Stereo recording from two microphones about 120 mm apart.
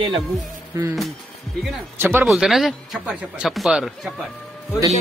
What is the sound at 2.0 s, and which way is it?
Speech, 20° right (ahead or behind).